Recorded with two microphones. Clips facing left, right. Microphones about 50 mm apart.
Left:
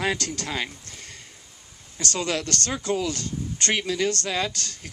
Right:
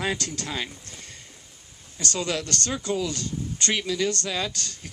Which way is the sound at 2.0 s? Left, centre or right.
Left.